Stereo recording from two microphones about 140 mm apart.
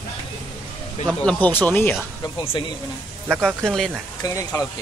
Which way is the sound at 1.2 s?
10° left (ahead or behind).